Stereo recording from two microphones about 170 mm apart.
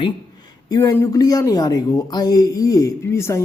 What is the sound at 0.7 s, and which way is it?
Speech, 15° left (ahead or behind).